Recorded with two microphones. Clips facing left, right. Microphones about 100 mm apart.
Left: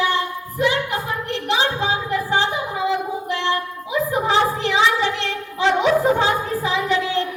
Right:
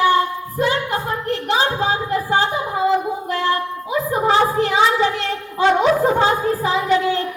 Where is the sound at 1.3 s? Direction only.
40° right (ahead or behind).